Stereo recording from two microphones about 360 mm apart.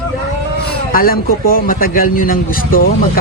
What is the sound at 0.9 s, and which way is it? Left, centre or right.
A man's voice, left.